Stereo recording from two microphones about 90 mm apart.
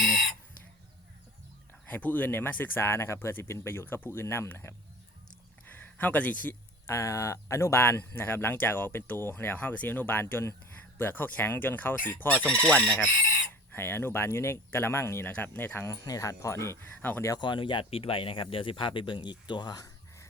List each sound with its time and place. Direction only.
1.9 s speech: 20° left (ahead or behind)
5.7 s speech: 15° left (ahead or behind)
15.9 s speech: 35° left (ahead or behind)
16.8 s speech: 20° left (ahead or behind)
17.3 s speech: 60° left (ahead or behind); by 20.2 s 45° left (ahead or behind)